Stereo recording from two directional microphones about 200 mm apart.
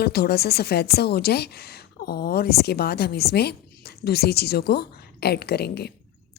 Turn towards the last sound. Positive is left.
turn(degrees=55)  # may be behind; listen again after turning